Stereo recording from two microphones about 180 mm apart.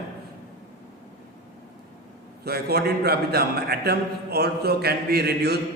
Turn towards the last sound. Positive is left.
turn(degrees=-65)  # may be behind; listen again after turning